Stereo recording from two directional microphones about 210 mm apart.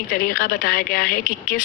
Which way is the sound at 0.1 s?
40° left (ahead or behind).